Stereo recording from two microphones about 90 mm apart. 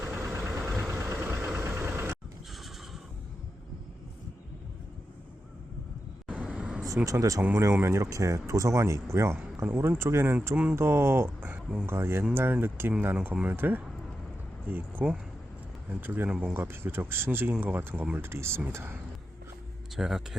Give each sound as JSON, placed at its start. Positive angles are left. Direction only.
{"t": 0.3, "sound": "vehicle", "side_deg": -30}
{"t": 0.6, "sound": "vehicle", "side_deg": 0}
{"t": 0.9, "sound": "vehicle", "side_deg": -30}
{"t": 6.2, "sound": "vehicle", "side_deg": -15}
{"t": 6.8, "sound": "speech", "side_deg": -35}
{"t": 11.9, "sound": "speech", "side_deg": -25}
{"t": 16.3, "sound": "speech", "side_deg": -10}
{"t": 16.6, "sound": "speech", "side_deg": -25}
{"t": 20.0, "sound": "speech", "side_deg": -5}